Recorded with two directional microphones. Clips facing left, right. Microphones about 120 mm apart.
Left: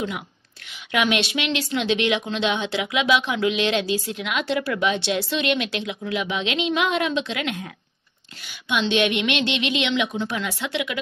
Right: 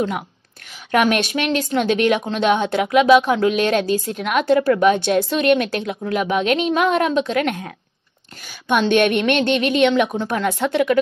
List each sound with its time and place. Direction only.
0.7 s a woman's voice: 45° right (ahead or behind)